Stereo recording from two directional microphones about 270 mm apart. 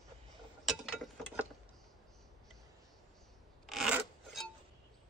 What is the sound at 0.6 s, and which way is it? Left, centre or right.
Mechanisms, centre.